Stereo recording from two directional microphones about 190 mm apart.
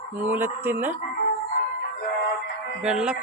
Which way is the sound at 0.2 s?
10° right (ahead or behind).